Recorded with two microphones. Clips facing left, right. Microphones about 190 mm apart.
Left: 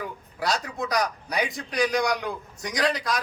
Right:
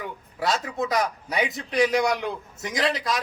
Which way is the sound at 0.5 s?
25° right (ahead or behind).